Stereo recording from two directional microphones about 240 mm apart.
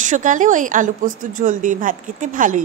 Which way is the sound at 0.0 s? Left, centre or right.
Right.